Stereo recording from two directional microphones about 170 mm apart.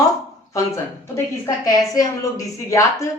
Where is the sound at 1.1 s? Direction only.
20° left (ahead or behind).